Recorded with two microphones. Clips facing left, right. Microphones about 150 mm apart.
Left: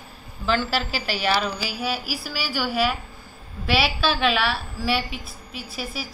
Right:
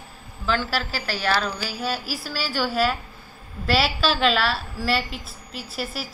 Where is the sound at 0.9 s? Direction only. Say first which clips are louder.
Even; 15° left (ahead or behind).